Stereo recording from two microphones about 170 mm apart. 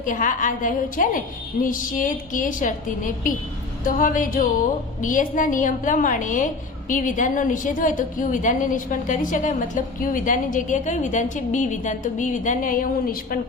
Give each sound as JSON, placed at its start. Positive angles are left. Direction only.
{"t": 0.0, "sound": "a woman's voice", "side_deg": 50}